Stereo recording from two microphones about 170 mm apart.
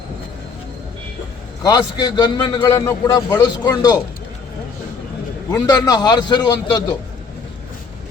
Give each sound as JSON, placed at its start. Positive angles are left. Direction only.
{"t": 1.6, "sound": "a man's voice", "side_deg": 25}
{"t": 5.5, "sound": "a man's voice", "side_deg": 20}